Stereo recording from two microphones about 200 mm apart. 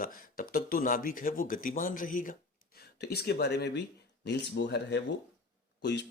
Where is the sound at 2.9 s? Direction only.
50° left (ahead or behind).